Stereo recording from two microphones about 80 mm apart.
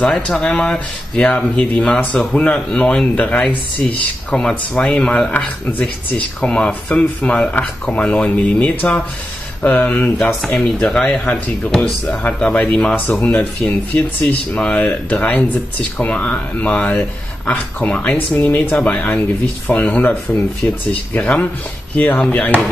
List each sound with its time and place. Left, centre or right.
0.1 s speech: centre; by 10.1 s left
10.1 s speech: centre